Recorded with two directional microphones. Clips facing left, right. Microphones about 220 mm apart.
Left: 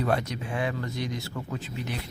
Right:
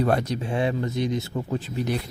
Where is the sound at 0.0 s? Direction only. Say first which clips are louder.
Right 5 dB; 40° right (ahead or behind).